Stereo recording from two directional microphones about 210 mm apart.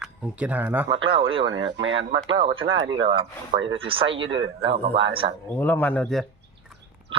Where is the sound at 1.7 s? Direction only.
60° right (ahead or behind).